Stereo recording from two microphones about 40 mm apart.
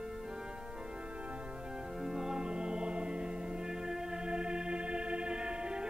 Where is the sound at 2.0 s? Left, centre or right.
Centre.